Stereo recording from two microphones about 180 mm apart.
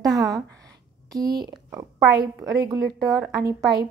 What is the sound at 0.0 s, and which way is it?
A woman's voice, 20° right (ahead or behind).